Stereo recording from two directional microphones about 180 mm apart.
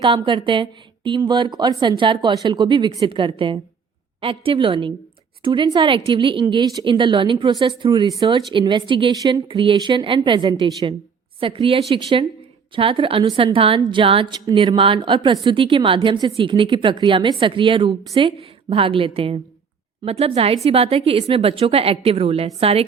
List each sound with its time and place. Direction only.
0.0 s a woman's voice: 25° right (ahead or behind)